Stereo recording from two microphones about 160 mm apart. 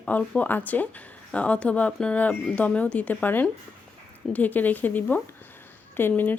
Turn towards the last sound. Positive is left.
turn(degrees=10)  # may be behind; listen again after turning